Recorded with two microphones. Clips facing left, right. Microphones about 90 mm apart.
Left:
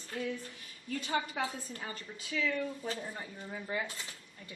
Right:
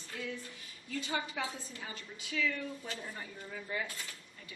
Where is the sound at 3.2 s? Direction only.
25° left (ahead or behind).